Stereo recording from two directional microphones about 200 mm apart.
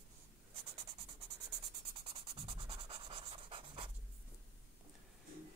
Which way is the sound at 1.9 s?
25° right (ahead or behind).